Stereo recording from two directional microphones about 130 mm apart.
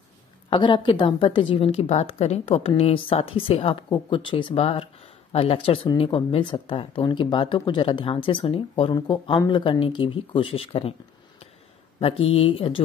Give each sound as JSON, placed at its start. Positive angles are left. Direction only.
{"t": 0.5, "sound": "a woman's voice", "side_deg": 40}